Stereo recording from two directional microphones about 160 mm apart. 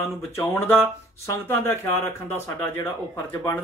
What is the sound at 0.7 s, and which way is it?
Speech, 15° left (ahead or behind).